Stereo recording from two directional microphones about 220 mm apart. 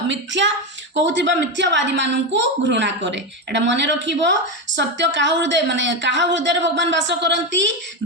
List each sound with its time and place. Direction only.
0.1 s a woman's voice: 55° right (ahead or behind)